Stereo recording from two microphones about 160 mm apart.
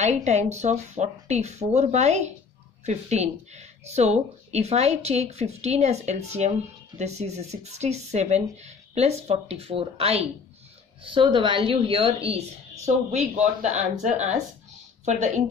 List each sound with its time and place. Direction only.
0.0 s a woman's voice: 45° right (ahead or behind)